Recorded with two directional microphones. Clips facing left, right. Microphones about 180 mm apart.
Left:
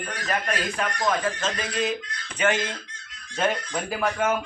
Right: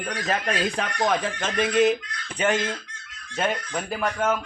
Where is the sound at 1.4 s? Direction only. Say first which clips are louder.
Right 6 dB; 55° right (ahead or behind).